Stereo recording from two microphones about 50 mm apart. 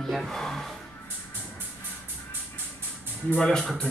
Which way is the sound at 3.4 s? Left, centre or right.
Centre.